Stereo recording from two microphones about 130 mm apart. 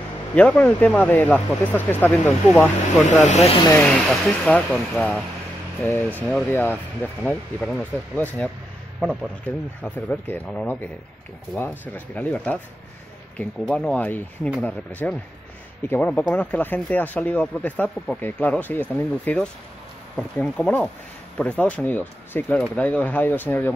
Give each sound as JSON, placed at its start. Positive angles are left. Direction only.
{"t": 0.4, "sound": "speech", "side_deg": 10}
{"t": 3.1, "sound": "speech", "side_deg": 65}
{"t": 3.8, "sound": "speech", "side_deg": 10}
{"t": 9.0, "sound": "a man's voice", "side_deg": 0}
{"t": 9.8, "sound": "speech", "side_deg": 15}
{"t": 11.9, "sound": "speech", "side_deg": 15}